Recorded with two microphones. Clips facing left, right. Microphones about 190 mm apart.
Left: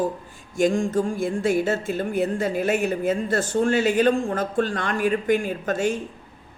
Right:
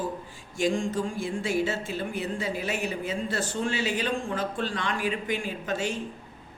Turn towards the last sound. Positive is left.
turn(degrees=50)  # may be behind; listen again after turning